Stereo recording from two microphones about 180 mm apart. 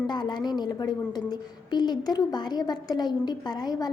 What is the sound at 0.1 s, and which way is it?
A woman's voice, 25° left (ahead or behind).